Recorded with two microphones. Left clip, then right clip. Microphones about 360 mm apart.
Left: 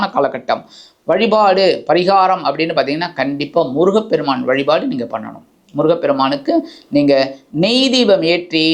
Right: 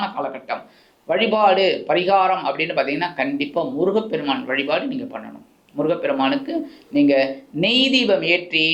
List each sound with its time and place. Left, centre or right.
0.0 s speech: left